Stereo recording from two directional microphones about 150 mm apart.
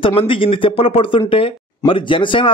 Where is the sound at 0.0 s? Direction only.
35° left (ahead or behind).